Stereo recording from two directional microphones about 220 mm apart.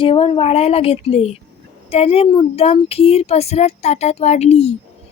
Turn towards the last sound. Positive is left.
turn(degrees=30)  # may be behind; listen again after turning